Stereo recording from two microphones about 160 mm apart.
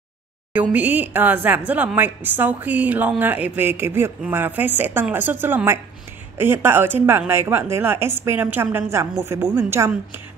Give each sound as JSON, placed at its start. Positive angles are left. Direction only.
{"t": 0.5, "sound": "speech", "side_deg": -10}